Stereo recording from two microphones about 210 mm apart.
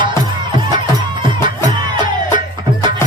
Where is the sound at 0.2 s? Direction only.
20° right (ahead or behind).